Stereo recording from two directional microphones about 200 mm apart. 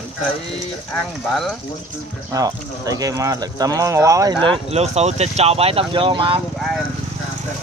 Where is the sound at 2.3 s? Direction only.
15° right (ahead or behind).